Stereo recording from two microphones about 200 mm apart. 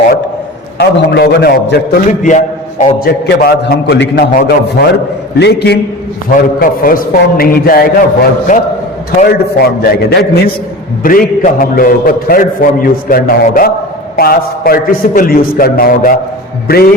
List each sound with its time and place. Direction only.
0.8 s a man's voice: 55° left (ahead or behind)
6.3 s a man's voice: 45° left (ahead or behind)